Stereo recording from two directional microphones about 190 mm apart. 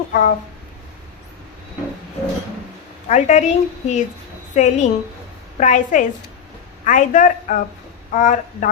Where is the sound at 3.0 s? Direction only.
40° left (ahead or behind).